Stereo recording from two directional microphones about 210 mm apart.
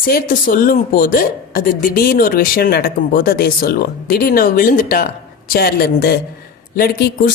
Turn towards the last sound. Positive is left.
turn(degrees=45)  # may be behind; listen again after turning